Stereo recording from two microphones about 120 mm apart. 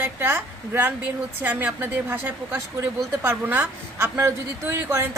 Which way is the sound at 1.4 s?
15° right (ahead or behind).